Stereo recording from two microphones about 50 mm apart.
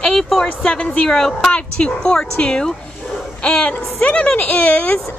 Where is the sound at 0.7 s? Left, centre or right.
Left.